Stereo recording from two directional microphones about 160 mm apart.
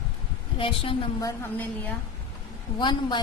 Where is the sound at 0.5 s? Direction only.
35° left (ahead or behind).